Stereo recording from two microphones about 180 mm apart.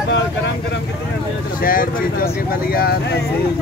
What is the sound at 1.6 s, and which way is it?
Speech, 50° left (ahead or behind).